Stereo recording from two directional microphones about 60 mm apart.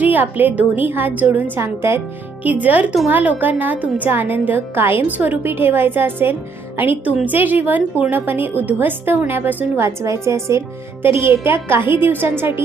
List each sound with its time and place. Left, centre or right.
0.0 s a woman's voice: right
2.4 s a woman's voice: right
9.7 s a woman's voice: right
11.0 s a woman's voice: right